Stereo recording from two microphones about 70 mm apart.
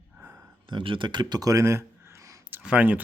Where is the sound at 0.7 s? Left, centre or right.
Right.